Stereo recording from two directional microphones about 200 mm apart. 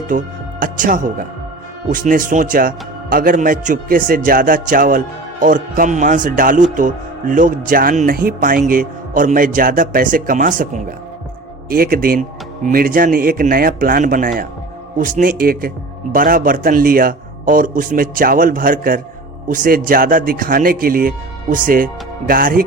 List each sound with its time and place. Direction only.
0.1 s a man's voice: 40° right (ahead or behind)
11.7 s a man's voice: 45° right (ahead or behind)